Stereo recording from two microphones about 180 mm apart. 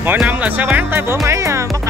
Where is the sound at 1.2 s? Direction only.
15° right (ahead or behind).